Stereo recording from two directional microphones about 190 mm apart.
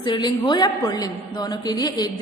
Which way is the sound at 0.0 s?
20° left (ahead or behind).